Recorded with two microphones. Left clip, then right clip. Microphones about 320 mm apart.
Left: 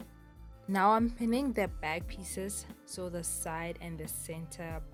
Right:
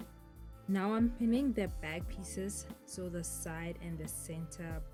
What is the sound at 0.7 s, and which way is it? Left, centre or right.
Speech, centre.